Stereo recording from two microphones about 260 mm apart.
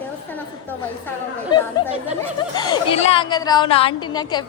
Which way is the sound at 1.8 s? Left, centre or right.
Centre.